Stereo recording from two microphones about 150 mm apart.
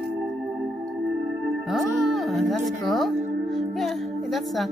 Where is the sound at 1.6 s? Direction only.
Centre (ahead or behind).